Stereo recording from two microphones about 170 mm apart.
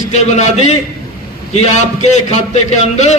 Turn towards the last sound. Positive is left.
turn(degrees=40)  # may be behind; listen again after turning